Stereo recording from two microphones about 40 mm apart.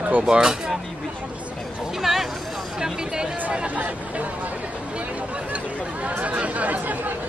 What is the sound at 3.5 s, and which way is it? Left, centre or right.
Speech, right.